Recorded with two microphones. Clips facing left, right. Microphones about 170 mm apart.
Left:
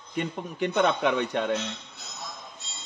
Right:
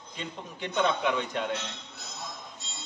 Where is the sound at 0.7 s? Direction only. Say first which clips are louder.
Left 2 dB; 60° left (ahead or behind).